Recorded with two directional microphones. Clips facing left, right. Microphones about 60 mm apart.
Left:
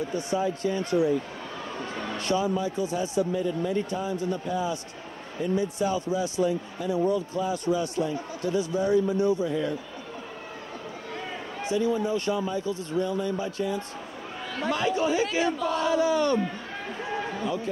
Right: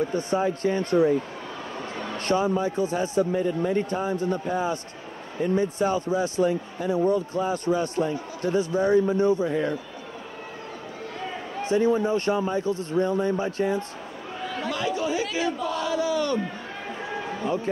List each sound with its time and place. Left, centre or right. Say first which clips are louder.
0.1 s speech: right 3 dB; right
2.1 s speech: right 3 dB; right
9.5 s speech: right 2 dB; right
11.7 s speech: right 4 dB; right
14.7 s speech: left 2 dB; left